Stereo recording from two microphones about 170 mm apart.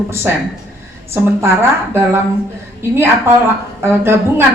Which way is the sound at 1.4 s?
15° right (ahead or behind).